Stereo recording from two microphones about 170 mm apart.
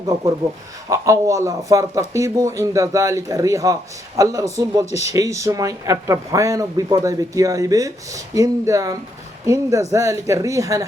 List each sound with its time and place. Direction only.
0.9 s speech: 20° right (ahead or behind)